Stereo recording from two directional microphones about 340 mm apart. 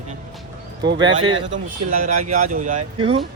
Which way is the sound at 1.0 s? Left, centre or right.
Centre.